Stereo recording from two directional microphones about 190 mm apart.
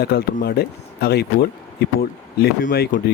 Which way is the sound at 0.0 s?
55° left (ahead or behind).